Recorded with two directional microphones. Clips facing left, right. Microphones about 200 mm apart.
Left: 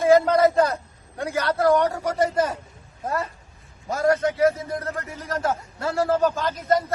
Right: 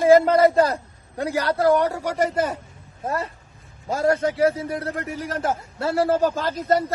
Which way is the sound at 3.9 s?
30° right (ahead or behind).